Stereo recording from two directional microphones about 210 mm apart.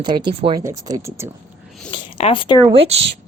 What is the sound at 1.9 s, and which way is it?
Speech, 25° left (ahead or behind).